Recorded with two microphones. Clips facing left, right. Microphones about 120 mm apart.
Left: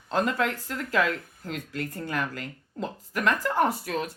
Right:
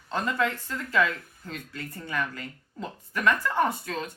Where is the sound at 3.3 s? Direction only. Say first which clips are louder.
Even; 40° left (ahead or behind).